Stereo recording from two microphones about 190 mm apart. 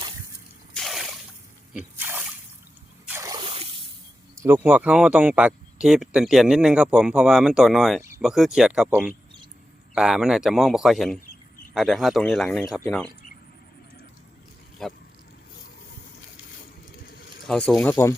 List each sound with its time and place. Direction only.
0.8 s a sound: centre (ahead or behind)
1.7 s speech: 10° right (ahead or behind)
3.1 s a sound: 15° right (ahead or behind)
4.4 s speech: 10° right (ahead or behind)
14.8 s speech: centre (ahead or behind)
17.4 s speech: centre (ahead or behind)